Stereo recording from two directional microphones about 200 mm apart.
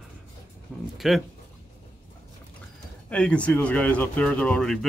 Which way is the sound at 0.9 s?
Centre (ahead or behind).